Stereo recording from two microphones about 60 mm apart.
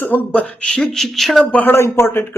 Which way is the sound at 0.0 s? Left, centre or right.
Left.